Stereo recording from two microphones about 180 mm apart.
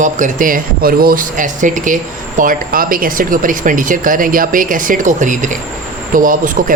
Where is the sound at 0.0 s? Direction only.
45° right (ahead or behind).